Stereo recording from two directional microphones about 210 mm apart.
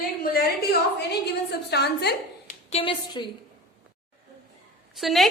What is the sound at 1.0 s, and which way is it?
Speech, 50° left (ahead or behind).